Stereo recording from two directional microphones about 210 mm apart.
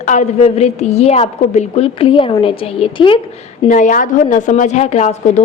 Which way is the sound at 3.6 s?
40° left (ahead or behind).